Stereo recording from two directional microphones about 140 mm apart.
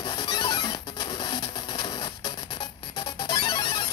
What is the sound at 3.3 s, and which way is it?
Music, 30° left (ahead or behind).